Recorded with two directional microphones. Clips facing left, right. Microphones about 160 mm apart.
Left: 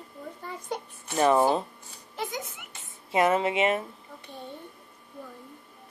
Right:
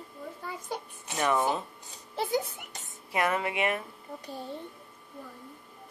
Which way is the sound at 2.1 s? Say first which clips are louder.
Right 5 dB; 30° right (ahead or behind).